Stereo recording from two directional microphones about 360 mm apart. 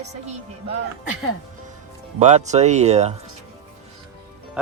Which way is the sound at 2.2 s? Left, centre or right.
Centre.